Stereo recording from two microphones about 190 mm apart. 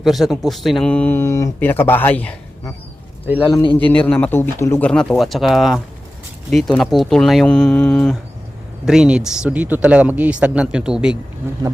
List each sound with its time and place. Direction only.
0.0 s speech: centre (ahead or behind)
3.5 s a man's voice: 25° left (ahead or behind)
3.8 s speech: 5° left (ahead or behind)